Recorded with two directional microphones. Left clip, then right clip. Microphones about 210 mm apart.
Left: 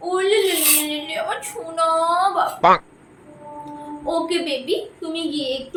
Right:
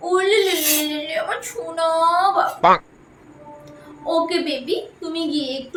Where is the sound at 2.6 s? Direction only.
Centre (ahead or behind).